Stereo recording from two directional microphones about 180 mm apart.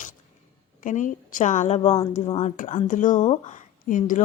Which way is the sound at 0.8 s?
45° left (ahead or behind).